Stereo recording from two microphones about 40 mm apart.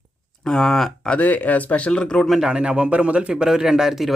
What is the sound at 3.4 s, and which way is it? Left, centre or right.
Speech, centre.